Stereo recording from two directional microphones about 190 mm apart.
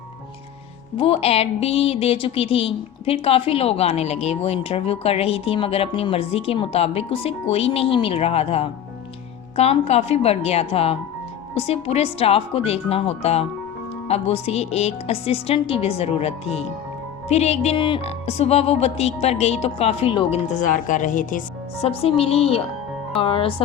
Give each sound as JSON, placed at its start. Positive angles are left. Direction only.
{"t": 0.9, "sound": "a woman's voice", "side_deg": 30}
{"t": 21.8, "sound": "a woman's voice", "side_deg": 30}